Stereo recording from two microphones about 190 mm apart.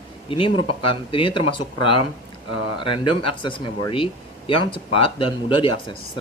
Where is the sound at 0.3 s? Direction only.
25° left (ahead or behind).